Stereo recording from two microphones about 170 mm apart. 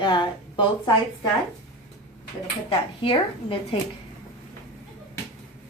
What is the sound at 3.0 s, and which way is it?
Speech, 30° left (ahead or behind).